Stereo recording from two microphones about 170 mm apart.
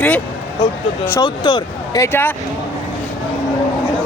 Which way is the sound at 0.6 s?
20° left (ahead or behind).